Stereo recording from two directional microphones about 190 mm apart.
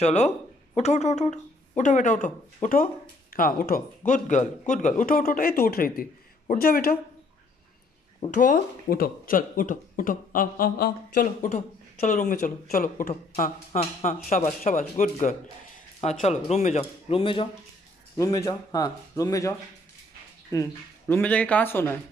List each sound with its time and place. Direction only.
0.0 s speech: 35° left (ahead or behind); by 7.0 s 50° left (ahead or behind)
8.4 s speech: 45° left (ahead or behind); by 17.5 s 30° left (ahead or behind)
18.1 s speech: 15° left (ahead or behind)
20.5 s speech: 15° left (ahead or behind)